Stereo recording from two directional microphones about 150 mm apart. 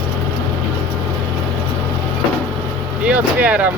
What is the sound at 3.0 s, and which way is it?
Speech, 10° right (ahead or behind).